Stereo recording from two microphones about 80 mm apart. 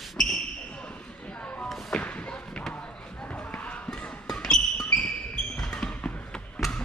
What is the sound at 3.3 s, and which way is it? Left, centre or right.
Basketball bounce, centre.